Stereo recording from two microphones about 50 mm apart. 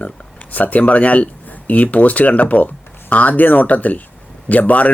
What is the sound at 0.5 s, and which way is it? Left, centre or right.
Speech, left.